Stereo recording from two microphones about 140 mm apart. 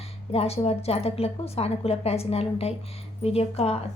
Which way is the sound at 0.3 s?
45° left (ahead or behind).